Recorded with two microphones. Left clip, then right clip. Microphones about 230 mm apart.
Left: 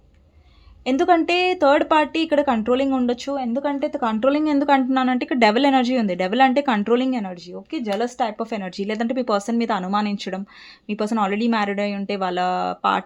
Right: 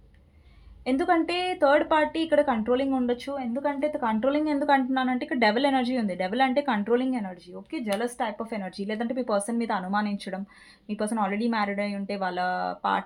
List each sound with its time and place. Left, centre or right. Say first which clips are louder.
0.9 s speech: left 7 dB; left